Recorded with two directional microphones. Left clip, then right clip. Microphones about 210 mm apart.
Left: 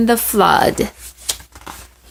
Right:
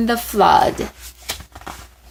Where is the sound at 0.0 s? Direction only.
30° left (ahead or behind).